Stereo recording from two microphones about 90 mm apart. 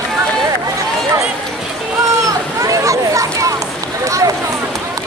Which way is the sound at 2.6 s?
40° right (ahead or behind).